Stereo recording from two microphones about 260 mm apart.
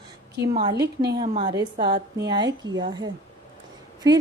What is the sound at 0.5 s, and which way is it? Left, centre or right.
Speech, centre.